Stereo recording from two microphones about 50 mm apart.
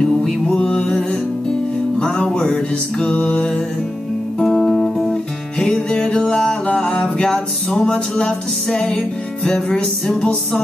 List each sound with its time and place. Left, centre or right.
0.0 s music: centre